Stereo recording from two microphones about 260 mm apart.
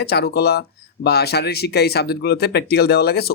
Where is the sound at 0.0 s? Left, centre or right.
Left.